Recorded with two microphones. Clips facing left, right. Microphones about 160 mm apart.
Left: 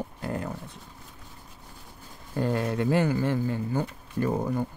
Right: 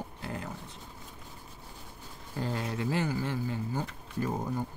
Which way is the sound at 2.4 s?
55° left (ahead or behind).